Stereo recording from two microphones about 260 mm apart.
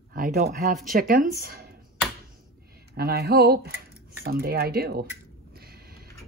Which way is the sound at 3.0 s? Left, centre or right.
Right.